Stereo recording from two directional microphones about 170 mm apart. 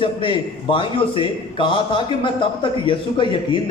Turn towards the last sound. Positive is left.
turn(degrees=30)  # may be behind; listen again after turning